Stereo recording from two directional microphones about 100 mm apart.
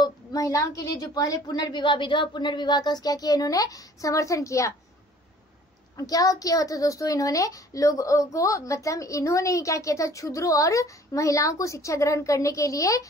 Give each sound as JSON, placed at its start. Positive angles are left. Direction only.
{"t": 0.0, "sound": "a woman's voice", "side_deg": 35}
{"t": 5.9, "sound": "a woman's voice", "side_deg": 35}